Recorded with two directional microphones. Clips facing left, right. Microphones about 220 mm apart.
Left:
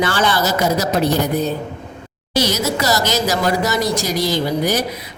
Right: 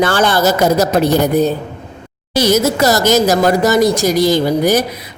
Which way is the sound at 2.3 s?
50° right (ahead or behind).